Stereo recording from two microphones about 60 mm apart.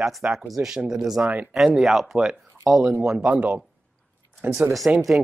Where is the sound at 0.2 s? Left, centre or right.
Right.